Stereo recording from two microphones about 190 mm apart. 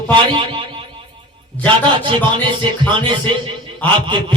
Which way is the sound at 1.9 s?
25° right (ahead or behind).